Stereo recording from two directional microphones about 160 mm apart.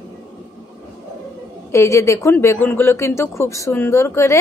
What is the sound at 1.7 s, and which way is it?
Speech, 15° left (ahead or behind).